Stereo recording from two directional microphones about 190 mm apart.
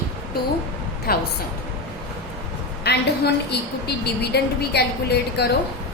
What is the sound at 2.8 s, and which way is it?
A woman's voice, 60° left (ahead or behind).